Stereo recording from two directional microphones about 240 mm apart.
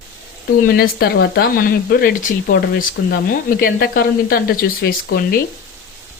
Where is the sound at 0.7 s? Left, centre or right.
Left.